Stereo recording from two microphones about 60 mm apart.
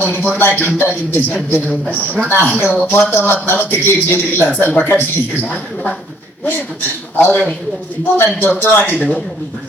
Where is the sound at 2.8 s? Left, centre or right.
Left.